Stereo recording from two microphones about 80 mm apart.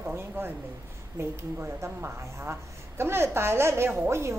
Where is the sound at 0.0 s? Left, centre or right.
Right.